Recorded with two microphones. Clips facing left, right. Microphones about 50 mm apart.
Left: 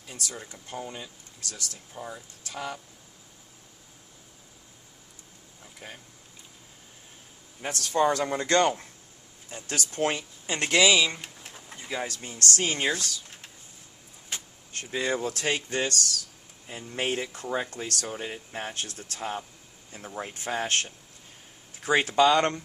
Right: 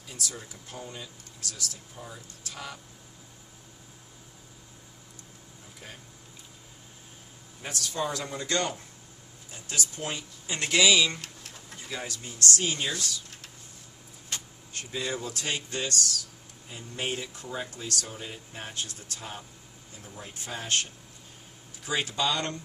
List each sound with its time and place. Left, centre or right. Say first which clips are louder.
0.8 s speech: left 3 dB; left
7.7 s speech: left 7 dB; left
10.8 s pigeon: left 1 dB; centre
12.0 s speech: right 4 dB; left
14.3 s vehicle: even; centre
14.9 s speech: left 5 dB; left
16.6 s speech: left 4 dB; left